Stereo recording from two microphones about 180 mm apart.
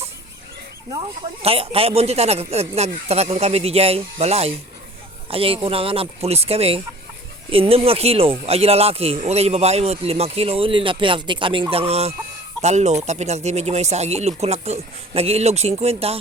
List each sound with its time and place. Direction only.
0.9 s speech: 30° right (ahead or behind)